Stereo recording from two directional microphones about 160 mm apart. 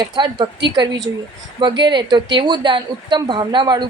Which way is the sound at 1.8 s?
30° right (ahead or behind).